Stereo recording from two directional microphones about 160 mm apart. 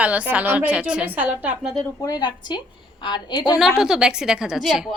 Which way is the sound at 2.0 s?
25° left (ahead or behind).